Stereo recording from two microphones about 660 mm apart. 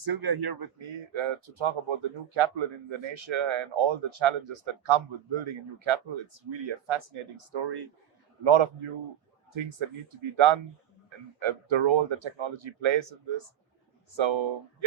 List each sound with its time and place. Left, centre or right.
0.0 s speech: right